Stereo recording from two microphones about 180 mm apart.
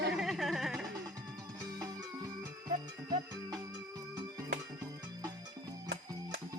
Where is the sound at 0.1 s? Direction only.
Centre (ahead or behind).